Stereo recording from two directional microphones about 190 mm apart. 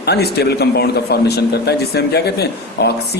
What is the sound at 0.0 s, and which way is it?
Speech, 60° left (ahead or behind).